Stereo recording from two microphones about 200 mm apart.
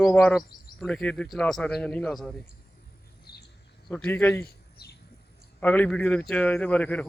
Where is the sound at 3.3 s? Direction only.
50° left (ahead or behind).